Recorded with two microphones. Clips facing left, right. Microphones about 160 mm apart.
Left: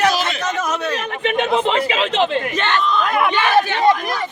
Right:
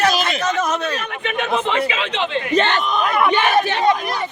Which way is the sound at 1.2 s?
30° left (ahead or behind).